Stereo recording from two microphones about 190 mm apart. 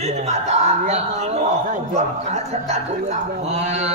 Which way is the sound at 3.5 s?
35° right (ahead or behind).